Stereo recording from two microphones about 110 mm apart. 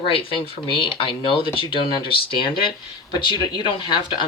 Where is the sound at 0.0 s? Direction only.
55° left (ahead or behind).